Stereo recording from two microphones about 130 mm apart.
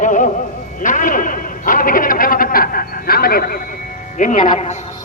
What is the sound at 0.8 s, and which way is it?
A man's voice, 90° left.